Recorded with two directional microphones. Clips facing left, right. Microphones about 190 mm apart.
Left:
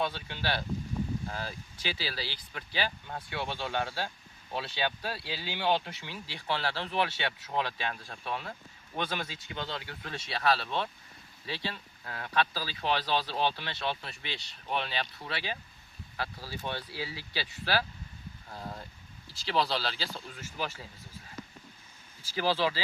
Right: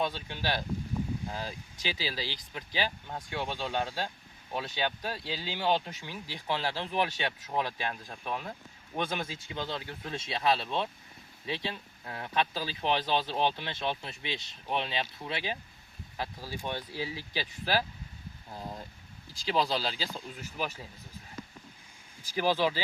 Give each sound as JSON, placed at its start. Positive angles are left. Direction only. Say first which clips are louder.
{"t": 0.0, "sound": "speech", "louder": "right 1 dB", "side_deg": -15}
{"t": 22.4, "sound": "speech", "louder": "right 1 dB", "side_deg": -15}